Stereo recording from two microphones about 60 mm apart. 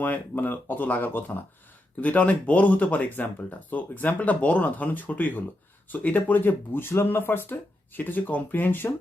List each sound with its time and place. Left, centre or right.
0.0 s speech: left